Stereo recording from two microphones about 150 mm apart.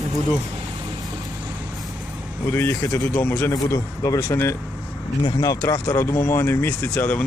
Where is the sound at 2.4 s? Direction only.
15° left (ahead or behind).